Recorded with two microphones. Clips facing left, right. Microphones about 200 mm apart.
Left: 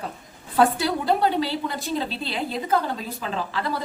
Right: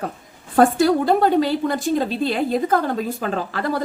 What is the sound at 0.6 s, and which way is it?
A woman's voice, 50° right (ahead or behind).